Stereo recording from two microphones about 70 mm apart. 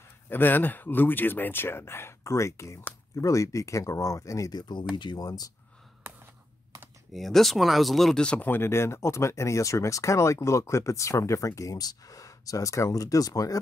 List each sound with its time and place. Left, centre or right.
0.3 s speech: left
4.5 s speech: left
4.9 s speech: left
7.1 s speech: centre
8.4 s speech: left